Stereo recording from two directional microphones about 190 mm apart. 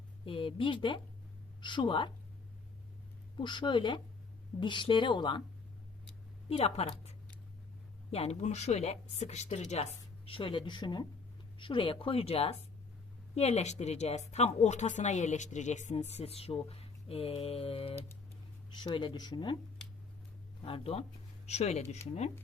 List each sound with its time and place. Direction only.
0.3 s speech: 30° left (ahead or behind)
3.3 s speech: 25° left (ahead or behind)
6.5 s speech: 30° left (ahead or behind)
20.6 s speech: 30° left (ahead or behind)